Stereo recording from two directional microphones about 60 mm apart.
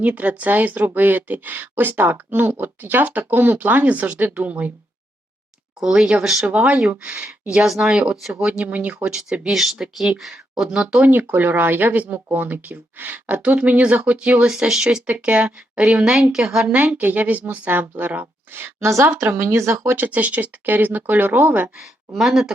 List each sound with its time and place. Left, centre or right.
0.0 s speech: right
5.8 s a woman's voice: centre
7.4 s a woman's voice: centre
8.7 s speech: right
9.5 s a woman's voice: centre
11.0 s a woman's voice: right; by 16.7 s centre
16.7 s speech: right
18.8 s a woman's voice: right
20.1 s speech: right
22.1 s a woman's voice: centre